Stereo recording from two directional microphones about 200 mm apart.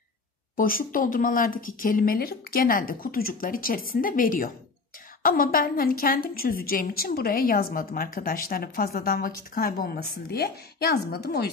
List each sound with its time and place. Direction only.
0.6 s a woman's voice: 45° left (ahead or behind)